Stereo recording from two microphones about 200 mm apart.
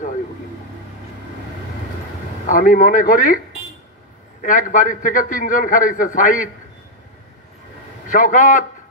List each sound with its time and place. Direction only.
2.4 s a man's voice: 40° left (ahead or behind)
4.4 s a man's voice: 40° left (ahead or behind)
8.1 s a man's voice: 40° left (ahead or behind)